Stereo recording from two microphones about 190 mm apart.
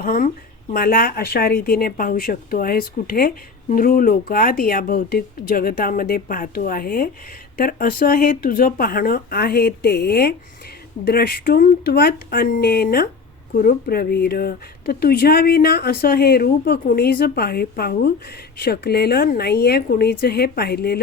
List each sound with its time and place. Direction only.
0.0 s speech: 50° left (ahead or behind)